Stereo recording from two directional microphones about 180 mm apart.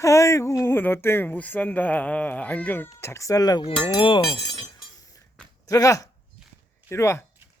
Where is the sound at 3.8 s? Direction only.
25° left (ahead or behind).